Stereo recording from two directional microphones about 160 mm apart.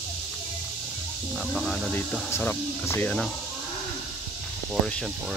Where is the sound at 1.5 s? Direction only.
Centre (ahead or behind).